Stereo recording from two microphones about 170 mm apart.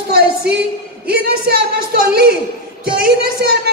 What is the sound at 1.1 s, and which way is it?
A woman's voice, 65° right (ahead or behind).